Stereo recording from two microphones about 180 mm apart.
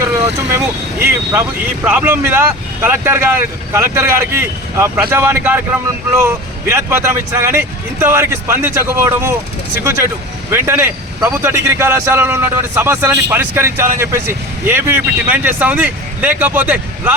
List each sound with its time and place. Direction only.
0.9 s a man's voice: 15° right (ahead or behind)